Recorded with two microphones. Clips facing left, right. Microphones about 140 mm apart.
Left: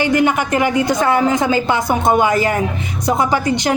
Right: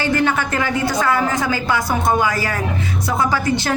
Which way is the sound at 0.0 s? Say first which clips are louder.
Left 3 dB; 15° left (ahead or behind).